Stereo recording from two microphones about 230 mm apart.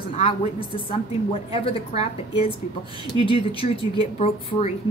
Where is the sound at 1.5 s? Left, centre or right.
Left.